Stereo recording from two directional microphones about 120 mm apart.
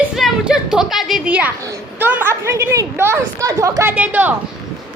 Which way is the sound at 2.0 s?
15° right (ahead or behind).